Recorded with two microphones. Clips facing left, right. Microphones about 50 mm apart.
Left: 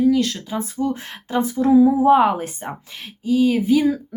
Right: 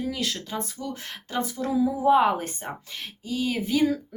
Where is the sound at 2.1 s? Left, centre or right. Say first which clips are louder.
Left 4 dB; centre.